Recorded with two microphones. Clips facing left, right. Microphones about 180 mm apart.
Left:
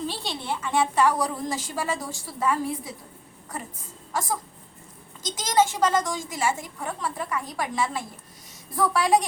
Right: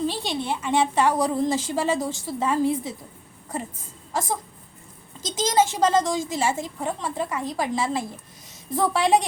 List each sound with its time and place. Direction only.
0.1 s a woman's voice: 20° right (ahead or behind)
4.1 s a woman's voice: 25° right (ahead or behind)